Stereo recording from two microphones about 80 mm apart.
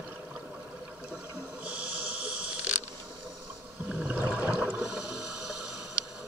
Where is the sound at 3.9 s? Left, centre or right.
Centre.